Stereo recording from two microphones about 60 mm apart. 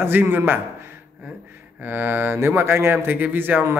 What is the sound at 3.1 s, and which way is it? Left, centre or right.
Speech, right.